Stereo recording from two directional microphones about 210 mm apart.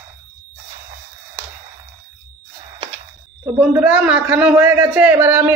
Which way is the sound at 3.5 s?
5° right (ahead or behind).